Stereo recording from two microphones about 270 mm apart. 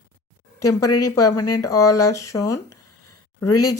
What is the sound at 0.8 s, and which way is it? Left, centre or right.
Speech, left.